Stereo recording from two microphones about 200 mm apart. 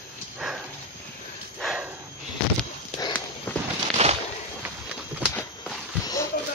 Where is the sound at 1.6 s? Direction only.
Centre (ahead or behind).